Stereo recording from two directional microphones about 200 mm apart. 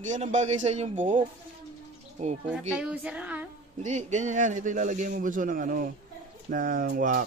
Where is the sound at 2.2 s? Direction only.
35° right (ahead or behind).